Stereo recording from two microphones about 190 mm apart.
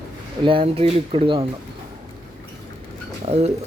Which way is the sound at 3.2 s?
35° right (ahead or behind).